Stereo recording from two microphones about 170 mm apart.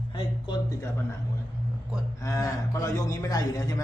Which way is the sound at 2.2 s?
20° left (ahead or behind).